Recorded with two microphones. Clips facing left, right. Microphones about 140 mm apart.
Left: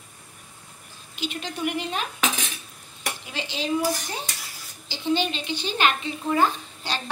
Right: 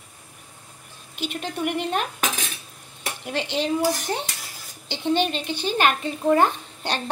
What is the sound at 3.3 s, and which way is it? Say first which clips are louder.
Speech: right 10 dB; 60° right (ahead or behind).